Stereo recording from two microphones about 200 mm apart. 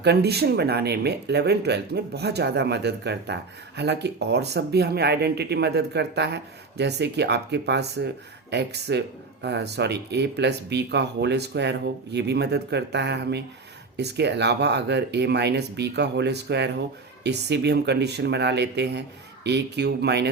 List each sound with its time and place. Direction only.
0.0 s speech: 55° right (ahead or behind)